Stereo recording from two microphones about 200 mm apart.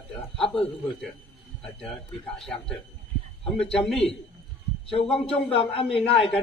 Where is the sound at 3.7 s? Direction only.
Centre (ahead or behind).